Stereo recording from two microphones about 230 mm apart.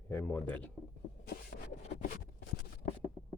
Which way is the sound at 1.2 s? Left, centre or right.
Left.